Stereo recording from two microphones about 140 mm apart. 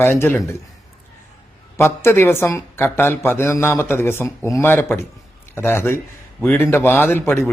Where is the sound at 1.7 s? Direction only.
20° left (ahead or behind).